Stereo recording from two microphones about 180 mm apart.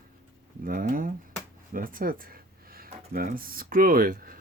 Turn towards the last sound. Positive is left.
turn(degrees=-50)  # may be behind; listen again after turning